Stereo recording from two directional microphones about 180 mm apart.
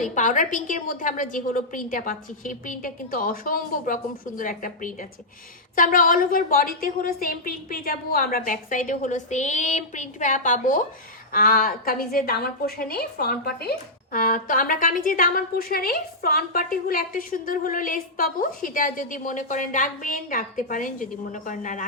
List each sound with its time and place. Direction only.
0.0 s a woman's voice: 45° left (ahead or behind)